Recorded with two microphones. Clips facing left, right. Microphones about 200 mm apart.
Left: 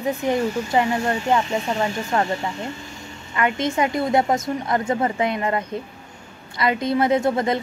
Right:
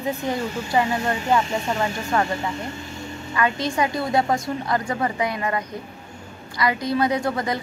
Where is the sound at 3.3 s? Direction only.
20° left (ahead or behind).